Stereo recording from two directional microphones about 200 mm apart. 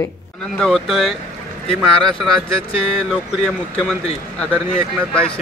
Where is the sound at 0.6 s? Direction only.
Centre (ahead or behind).